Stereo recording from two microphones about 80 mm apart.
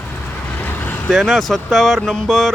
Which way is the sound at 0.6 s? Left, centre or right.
Left.